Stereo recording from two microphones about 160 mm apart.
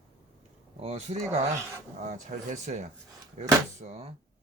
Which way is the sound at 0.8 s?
45° right (ahead or behind).